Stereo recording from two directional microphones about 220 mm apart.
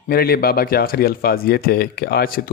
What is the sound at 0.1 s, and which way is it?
Speech, 45° left (ahead or behind).